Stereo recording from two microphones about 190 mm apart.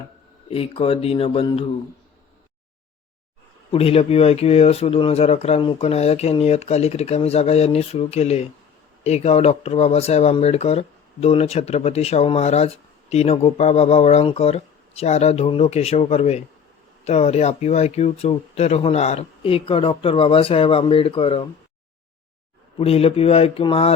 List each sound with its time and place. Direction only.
0.4 s speech: 30° left (ahead or behind)
3.7 s speech: 30° left (ahead or behind)
22.8 s speech: 30° left (ahead or behind)